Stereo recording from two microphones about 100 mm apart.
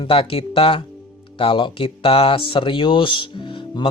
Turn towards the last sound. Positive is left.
turn(degrees=55)  # may be behind; listen again after turning